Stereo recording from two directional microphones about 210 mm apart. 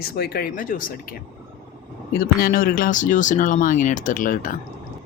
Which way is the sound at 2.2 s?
45° left (ahead or behind).